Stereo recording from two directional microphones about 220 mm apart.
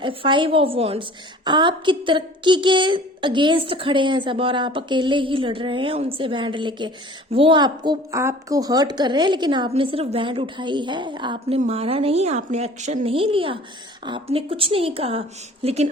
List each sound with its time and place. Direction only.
0.0 s a woman's voice: 25° right (ahead or behind)